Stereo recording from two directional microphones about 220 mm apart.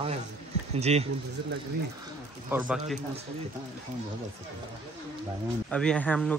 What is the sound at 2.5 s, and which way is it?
Speech, 10° right (ahead or behind).